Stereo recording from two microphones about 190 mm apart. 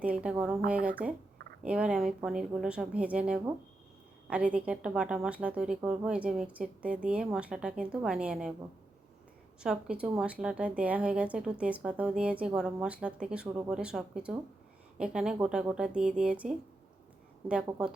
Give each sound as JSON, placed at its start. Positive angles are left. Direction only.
{"t": 0.0, "sound": "speech", "side_deg": -5}
{"t": 9.6, "sound": "speech", "side_deg": -5}